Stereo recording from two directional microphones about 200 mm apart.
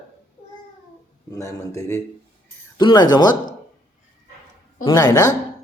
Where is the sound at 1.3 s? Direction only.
15° left (ahead or behind).